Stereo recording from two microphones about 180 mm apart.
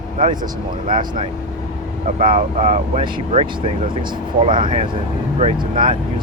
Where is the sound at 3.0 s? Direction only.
30° right (ahead or behind).